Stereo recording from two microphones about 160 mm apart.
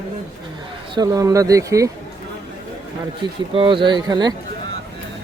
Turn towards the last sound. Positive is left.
turn(degrees=-25)  # may be behind; listen again after turning